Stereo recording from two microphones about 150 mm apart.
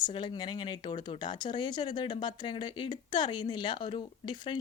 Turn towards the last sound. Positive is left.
turn(degrees=30)  # may be behind; listen again after turning